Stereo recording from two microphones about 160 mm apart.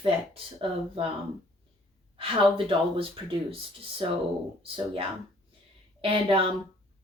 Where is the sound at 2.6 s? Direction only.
35° right (ahead or behind).